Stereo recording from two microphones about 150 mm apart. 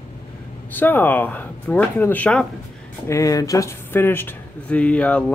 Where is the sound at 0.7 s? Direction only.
10° left (ahead or behind).